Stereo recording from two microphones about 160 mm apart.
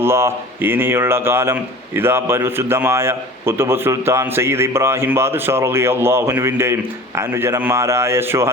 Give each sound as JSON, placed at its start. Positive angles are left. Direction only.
{"t": 0.0, "sound": "a man's voice", "side_deg": -15}